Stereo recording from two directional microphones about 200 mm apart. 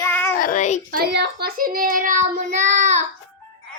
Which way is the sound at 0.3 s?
40° left (ahead or behind).